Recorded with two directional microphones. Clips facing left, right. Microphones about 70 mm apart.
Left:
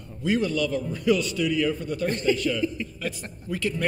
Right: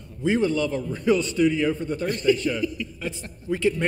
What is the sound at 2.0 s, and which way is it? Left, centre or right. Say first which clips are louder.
Speech: right 3 dB; left.